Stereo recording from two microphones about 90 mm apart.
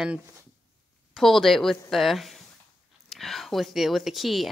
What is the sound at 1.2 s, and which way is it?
A woman's voice, centre (ahead or behind).